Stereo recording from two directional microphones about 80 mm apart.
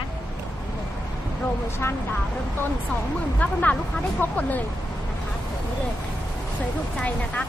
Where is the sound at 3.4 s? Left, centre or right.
Centre.